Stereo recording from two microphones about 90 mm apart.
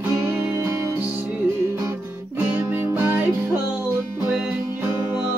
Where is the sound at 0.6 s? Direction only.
30° right (ahead or behind).